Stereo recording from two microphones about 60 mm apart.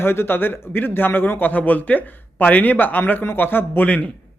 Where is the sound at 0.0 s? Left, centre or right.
Left.